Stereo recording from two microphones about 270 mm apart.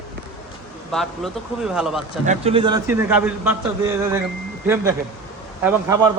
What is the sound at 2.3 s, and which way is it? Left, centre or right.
A man's voice, right.